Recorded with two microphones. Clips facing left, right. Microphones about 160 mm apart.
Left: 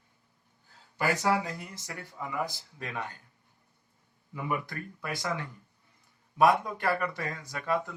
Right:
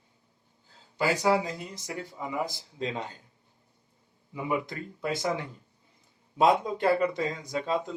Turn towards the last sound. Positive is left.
turn(degrees=-20)  # may be behind; listen again after turning